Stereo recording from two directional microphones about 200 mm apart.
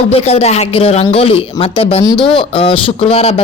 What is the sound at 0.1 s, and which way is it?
Speech, 30° left (ahead or behind).